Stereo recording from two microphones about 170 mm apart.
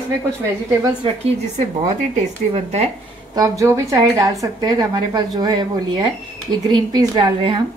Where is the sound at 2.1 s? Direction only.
40° right (ahead or behind).